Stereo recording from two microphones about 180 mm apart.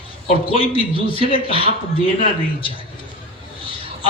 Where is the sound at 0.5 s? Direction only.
30° left (ahead or behind).